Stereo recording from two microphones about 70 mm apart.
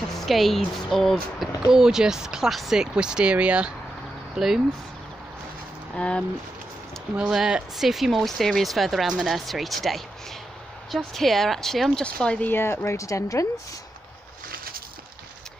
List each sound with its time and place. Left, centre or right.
0.1 s speech: centre
1.7 s speech: centre
4.4 s speech: centre
5.9 s speech: centre
7.2 s speech: centre
12.0 s speech: centre
12.4 s speech: left